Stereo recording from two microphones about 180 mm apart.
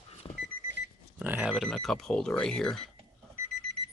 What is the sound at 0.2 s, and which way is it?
Alarm clock, 10° left (ahead or behind).